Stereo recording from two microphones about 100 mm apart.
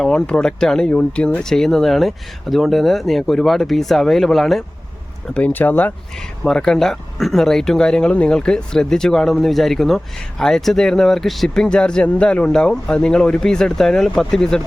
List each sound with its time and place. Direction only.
0.0 s speech: 10° left (ahead or behind)
5.3 s speech: 15° left (ahead or behind)
6.1 s speech: 5° left (ahead or behind)